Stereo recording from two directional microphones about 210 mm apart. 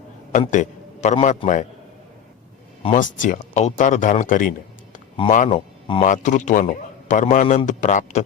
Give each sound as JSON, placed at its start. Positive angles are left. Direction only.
{"t": 0.3, "sound": "a man's voice", "side_deg": 35}
{"t": 2.8, "sound": "a man's voice", "side_deg": 40}
{"t": 5.5, "sound": "speech", "side_deg": 25}
{"t": 6.1, "sound": "a man's voice", "side_deg": 35}